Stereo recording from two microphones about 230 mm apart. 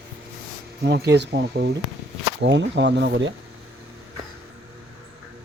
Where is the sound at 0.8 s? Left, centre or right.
Right.